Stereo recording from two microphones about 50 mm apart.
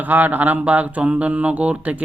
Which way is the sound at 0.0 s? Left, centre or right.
Right.